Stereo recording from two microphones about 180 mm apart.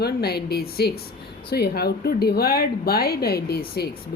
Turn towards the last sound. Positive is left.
turn(degrees=60)  # may be behind; listen again after turning